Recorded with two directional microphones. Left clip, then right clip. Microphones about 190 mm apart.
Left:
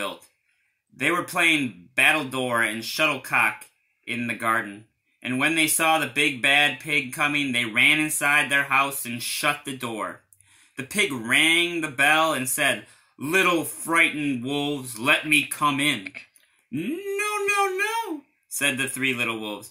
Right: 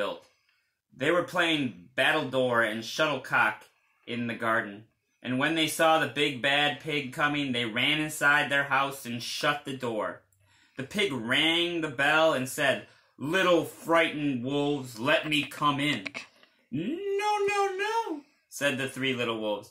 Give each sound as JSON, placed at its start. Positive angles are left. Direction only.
{"t": 0.9, "sound": "speech", "side_deg": 5}
{"t": 16.0, "sound": "speech", "side_deg": -35}
{"t": 17.1, "sound": "a sound", "side_deg": 5}
{"t": 18.6, "sound": "speech", "side_deg": 5}